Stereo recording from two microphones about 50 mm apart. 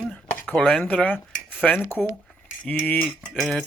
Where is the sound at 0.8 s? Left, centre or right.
Left.